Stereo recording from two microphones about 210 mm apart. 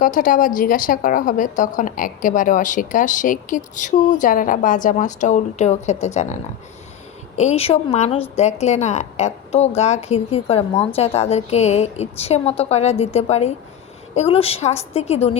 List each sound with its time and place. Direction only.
0.0 s a woman's voice: 40° left (ahead or behind)
7.3 s a woman's voice: 30° left (ahead or behind)